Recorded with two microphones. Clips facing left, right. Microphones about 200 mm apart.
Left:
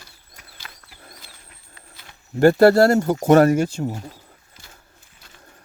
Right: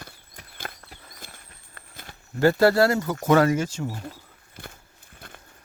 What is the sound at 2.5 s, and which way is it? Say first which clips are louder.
Speech: left 5 dB; 45° left (ahead or behind).